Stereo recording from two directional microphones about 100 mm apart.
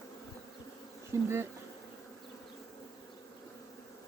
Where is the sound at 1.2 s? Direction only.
25° right (ahead or behind).